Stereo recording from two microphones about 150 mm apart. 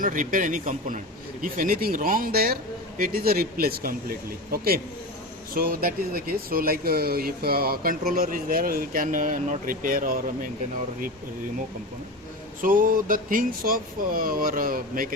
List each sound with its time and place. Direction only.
0.0 s a man's voice: 65° right (ahead or behind); by 4.8 s 85° right
5.5 s speech: 75° right (ahead or behind)
12.6 s speech: 65° right (ahead or behind)